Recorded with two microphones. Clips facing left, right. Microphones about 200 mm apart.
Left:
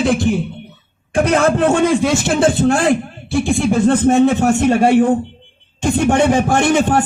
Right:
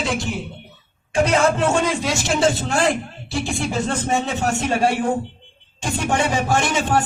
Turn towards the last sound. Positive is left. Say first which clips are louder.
# left 6 dB
turn(degrees=55)  # may be behind; listen again after turning